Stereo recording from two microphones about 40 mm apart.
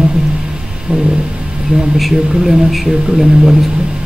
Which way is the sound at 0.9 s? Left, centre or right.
Right.